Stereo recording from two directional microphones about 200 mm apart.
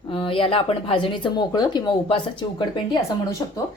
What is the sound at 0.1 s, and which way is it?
Speech, 25° left (ahead or behind).